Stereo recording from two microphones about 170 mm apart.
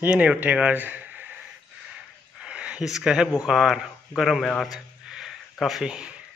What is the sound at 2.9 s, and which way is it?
A man's voice, 5° right (ahead or behind).